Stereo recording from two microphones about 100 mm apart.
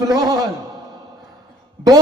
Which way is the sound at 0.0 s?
35° right (ahead or behind).